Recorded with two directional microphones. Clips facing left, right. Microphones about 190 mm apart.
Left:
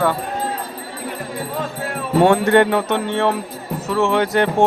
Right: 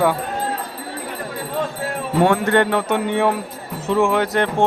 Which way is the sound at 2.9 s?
10° right (ahead or behind).